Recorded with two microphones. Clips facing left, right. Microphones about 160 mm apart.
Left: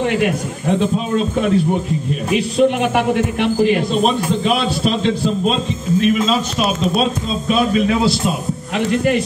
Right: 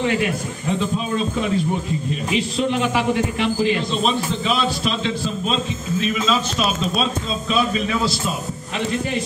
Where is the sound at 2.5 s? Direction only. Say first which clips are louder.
Left 7 dB; 60° left (ahead or behind).